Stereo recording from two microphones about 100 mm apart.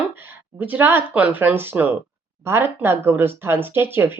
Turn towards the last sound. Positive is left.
turn(degrees=-20)  # may be behind; listen again after turning